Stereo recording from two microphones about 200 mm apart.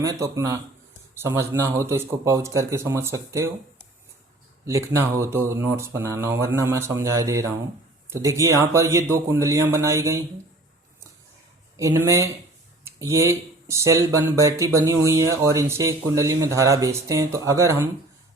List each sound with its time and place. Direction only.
0.0 s speech: 15° right (ahead or behind)
4.6 s speech: 15° right (ahead or behind)
11.8 s speech: 15° right (ahead or behind)